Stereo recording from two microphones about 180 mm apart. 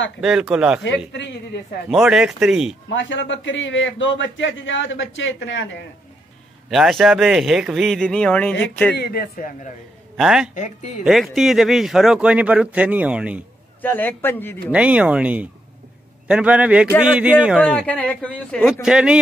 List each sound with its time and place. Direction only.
0.2 s a man's voice: 5° right (ahead or behind)
0.8 s a man's voice: 75° left (ahead or behind)
1.9 s a man's voice: 5° right (ahead or behind)
2.9 s a man's voice: 90° left
6.7 s a man's voice: centre (ahead or behind)
8.9 s speech: 60° left (ahead or behind)
10.1 s a man's voice: 5° right (ahead or behind)
10.5 s speech: 45° left (ahead or behind)
11.1 s a man's voice: centre (ahead or behind)
13.7 s a man's voice: 10° left (ahead or behind)
14.7 s speech: 5° right (ahead or behind)
17.6 s a man's voice: 5° left (ahead or behind)